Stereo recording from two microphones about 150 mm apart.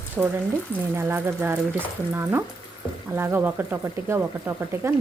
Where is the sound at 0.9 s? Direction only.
15° right (ahead or behind).